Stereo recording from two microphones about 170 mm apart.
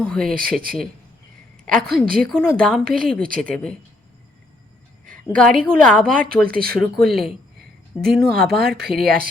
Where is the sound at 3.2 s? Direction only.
55° right (ahead or behind).